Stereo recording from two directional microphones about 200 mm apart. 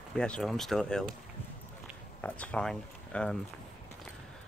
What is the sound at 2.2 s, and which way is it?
Speech, 5° left (ahead or behind).